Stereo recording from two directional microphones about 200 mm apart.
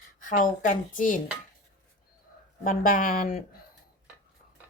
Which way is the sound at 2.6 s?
45° left (ahead or behind).